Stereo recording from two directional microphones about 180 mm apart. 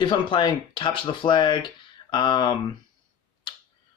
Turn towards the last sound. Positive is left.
turn(degrees=25)  # may be behind; listen again after turning